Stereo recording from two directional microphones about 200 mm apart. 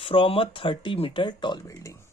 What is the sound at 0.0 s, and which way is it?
Speech, 25° left (ahead or behind).